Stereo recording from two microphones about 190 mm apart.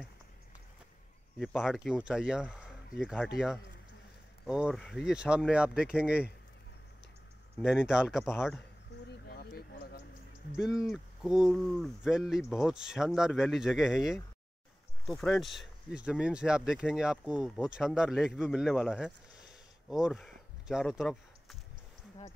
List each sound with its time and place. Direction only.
1.4 s speech: centre (ahead or behind)
7.6 s speech: 5° right (ahead or behind)
8.9 s a sound: 60° left (ahead or behind)
10.6 s speech: centre (ahead or behind)